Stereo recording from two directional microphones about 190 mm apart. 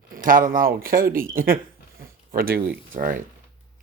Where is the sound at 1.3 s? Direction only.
50° right (ahead or behind).